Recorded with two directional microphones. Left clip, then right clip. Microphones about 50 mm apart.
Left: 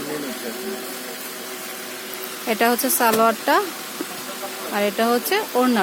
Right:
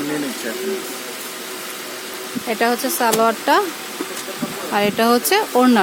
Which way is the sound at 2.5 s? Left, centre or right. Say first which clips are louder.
Right 1 dB; left.